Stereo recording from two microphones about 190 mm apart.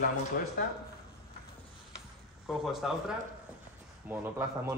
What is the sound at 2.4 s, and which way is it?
Speech, centre (ahead or behind).